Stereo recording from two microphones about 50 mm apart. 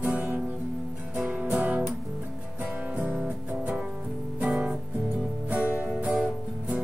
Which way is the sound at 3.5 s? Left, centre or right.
Right.